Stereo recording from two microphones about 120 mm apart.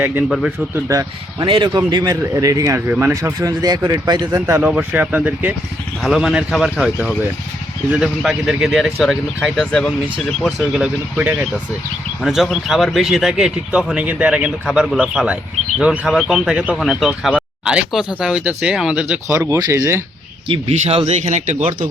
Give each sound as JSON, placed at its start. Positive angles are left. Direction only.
{"t": 0.0, "sound": "speech", "side_deg": -15}
{"t": 0.3, "sound": "speech", "side_deg": 0}
{"t": 0.7, "sound": "speech", "side_deg": -25}
{"t": 1.4, "sound": "speech", "side_deg": -40}
{"t": 2.2, "sound": "speech", "side_deg": -25}
{"t": 4.6, "sound": "speech", "side_deg": -10}
{"t": 6.0, "sound": "speech", "side_deg": 0}
{"t": 10.8, "sound": "speech", "side_deg": -10}
{"t": 19.3, "sound": "speech", "side_deg": -20}
{"t": 20.5, "sound": "speech", "side_deg": -55}